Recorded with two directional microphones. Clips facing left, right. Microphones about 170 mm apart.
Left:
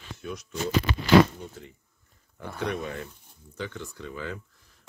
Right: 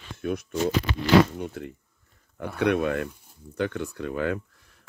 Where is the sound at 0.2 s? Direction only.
55° right (ahead or behind).